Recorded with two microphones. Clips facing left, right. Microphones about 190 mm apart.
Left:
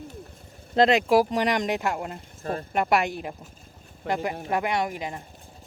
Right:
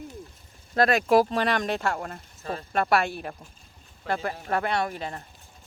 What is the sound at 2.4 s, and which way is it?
Speech, 50° left (ahead or behind).